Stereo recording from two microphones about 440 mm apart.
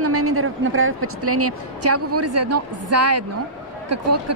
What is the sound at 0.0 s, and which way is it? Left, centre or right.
Speech, right.